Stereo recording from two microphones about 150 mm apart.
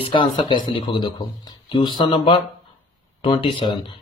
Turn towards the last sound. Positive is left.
turn(degrees=35)  # may be behind; listen again after turning